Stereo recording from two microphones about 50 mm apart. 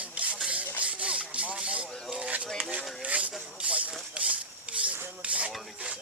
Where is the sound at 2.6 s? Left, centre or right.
Right.